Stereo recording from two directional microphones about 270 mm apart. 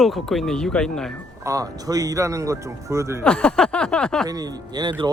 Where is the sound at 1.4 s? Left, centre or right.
Centre.